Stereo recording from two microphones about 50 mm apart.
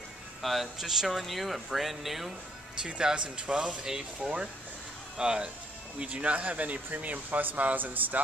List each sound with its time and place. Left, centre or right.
0.4 s speech: centre
2.8 s speech: centre; by 8.2 s right